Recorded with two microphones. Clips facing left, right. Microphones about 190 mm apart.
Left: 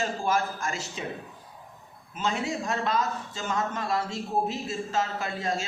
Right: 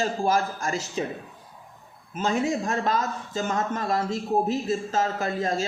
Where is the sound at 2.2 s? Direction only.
45° right (ahead or behind).